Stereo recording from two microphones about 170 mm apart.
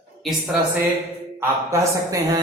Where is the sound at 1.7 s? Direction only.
20° right (ahead or behind).